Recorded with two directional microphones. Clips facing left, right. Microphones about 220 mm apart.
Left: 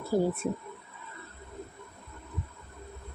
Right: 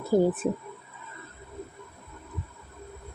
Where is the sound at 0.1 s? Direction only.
20° right (ahead or behind).